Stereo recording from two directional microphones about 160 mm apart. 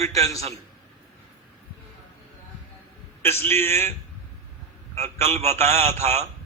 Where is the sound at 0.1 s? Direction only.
20° left (ahead or behind).